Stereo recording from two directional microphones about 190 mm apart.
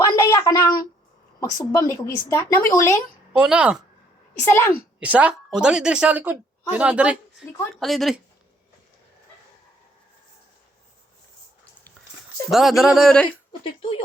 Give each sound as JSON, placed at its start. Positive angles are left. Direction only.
{"t": 0.0, "sound": "a sound", "side_deg": 15}
{"t": 1.4, "sound": "a woman's voice", "side_deg": 15}
{"t": 3.3, "sound": "a woman's voice", "side_deg": -5}
{"t": 4.4, "sound": "a woman's voice", "side_deg": 10}
{"t": 4.9, "sound": "a woman's voice", "side_deg": -5}
{"t": 12.5, "sound": "a woman's voice", "side_deg": 0}